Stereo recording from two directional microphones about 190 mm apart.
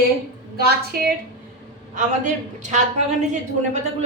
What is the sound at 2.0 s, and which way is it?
Speech, 40° right (ahead or behind).